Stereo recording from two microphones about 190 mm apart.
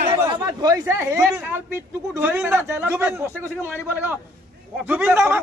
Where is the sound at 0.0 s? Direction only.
30° right (ahead or behind).